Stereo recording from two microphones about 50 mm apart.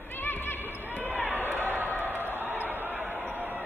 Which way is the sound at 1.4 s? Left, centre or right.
Left.